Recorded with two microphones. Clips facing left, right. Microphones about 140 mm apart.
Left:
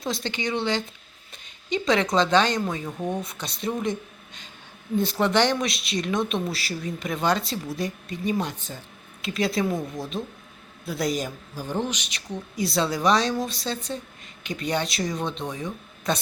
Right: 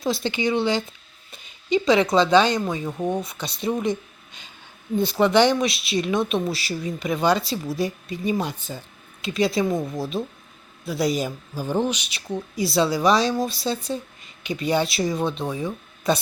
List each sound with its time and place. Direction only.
0.0 s a woman's voice: 5° right (ahead or behind)
3.0 s a woman's voice: 20° right (ahead or behind)
3.2 s speech: centre (ahead or behind)
4.9 s speech: centre (ahead or behind)
9.6 s a woman's voice: 20° right (ahead or behind)
10.0 s speech: 5° right (ahead or behind)